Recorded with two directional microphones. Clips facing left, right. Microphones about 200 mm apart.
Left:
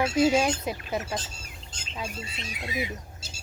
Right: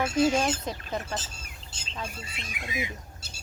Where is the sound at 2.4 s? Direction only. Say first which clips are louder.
Left 2 dB; 50° right (ahead or behind).